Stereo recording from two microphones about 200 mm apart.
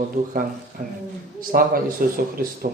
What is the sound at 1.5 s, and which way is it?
Speech, 50° right (ahead or behind).